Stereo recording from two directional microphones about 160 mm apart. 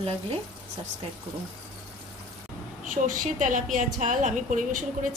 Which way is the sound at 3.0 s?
55° right (ahead or behind).